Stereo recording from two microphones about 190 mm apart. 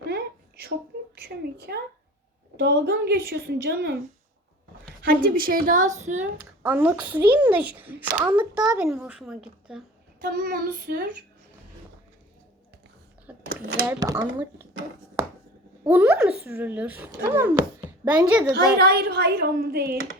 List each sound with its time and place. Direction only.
0.0 s a sound: 60° right (ahead or behind)
1.1 s a woman's voice: 55° right (ahead or behind)
5.0 s a woman's voice: 50° right (ahead or behind)
6.0 s a sound: 40° right (ahead or behind)
6.6 s speech: 5° right (ahead or behind)
8.3 s a sound: 25° right (ahead or behind)
8.7 s a woman's voice: 5° right (ahead or behind)
10.2 s a woman's voice: 50° right (ahead or behind)
13.3 s speech: 10° right (ahead or behind)
15.8 s speech: 10° right (ahead or behind)
18.8 s a woman's voice: 55° right (ahead or behind)